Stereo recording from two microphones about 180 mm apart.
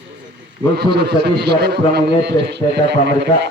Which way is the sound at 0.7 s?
65° right (ahead or behind).